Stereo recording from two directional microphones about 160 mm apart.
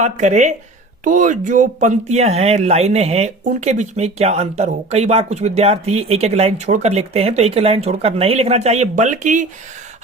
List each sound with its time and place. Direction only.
0.0 s speech: 45° right (ahead or behind)